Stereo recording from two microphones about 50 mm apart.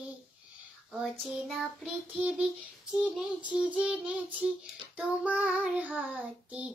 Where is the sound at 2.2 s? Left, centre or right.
Centre.